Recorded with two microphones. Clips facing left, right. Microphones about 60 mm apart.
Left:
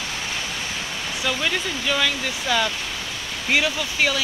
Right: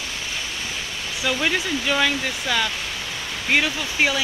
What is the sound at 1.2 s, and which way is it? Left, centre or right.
Speech, centre.